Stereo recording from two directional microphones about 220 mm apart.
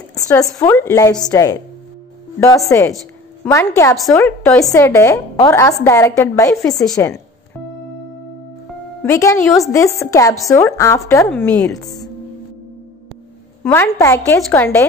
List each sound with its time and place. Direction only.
0.1 s a sound: 15° left (ahead or behind)
0.6 s a woman's voice: 10° left (ahead or behind)
3.4 s a woman's voice: 15° left (ahead or behind)
6.8 s a woman's voice: centre (ahead or behind)
9.0 s a woman's voice: 15° left (ahead or behind)
13.6 s a woman's voice: 10° left (ahead or behind)